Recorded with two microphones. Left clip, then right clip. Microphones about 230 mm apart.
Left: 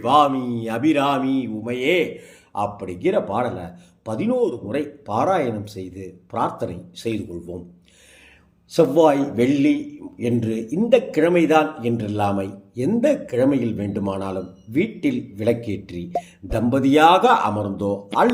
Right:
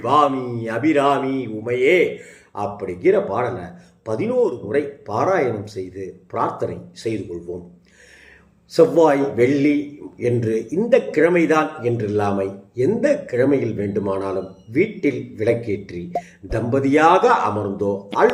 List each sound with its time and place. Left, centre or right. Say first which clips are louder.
0.0 s mantra: even; left
1.4 s a man's voice: right 5 dB; left
8.7 s a man's voice: right 2 dB; left